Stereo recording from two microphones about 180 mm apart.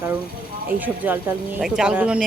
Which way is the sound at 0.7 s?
10° right (ahead or behind).